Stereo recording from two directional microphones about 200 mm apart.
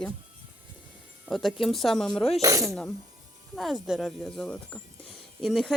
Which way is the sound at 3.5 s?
Centre (ahead or behind).